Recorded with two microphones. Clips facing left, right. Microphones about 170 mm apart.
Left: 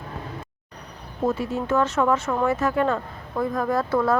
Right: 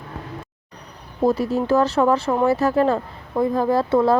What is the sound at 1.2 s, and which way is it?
A woman's voice, 35° right (ahead or behind).